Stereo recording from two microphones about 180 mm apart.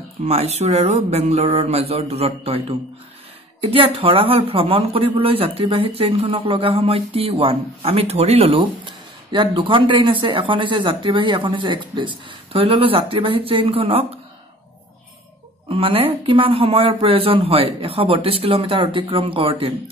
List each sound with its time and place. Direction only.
0.2 s speech: 35° right (ahead or behind)
3.6 s speech: 30° right (ahead or behind)
15.7 s speech: 30° right (ahead or behind)